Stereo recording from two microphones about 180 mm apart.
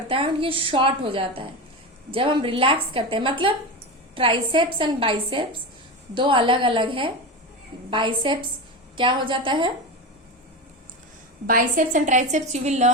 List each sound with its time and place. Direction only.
0.1 s a woman's voice: 30° right (ahead or behind)
11.4 s a woman's voice: 50° right (ahead or behind)